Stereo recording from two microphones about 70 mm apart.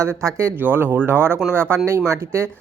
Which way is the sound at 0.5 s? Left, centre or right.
Right.